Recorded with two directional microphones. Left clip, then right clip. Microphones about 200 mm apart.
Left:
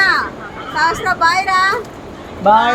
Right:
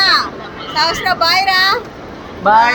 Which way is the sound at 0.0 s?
15° right (ahead or behind).